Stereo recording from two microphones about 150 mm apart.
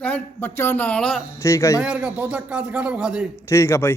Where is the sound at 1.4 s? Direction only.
20° left (ahead or behind).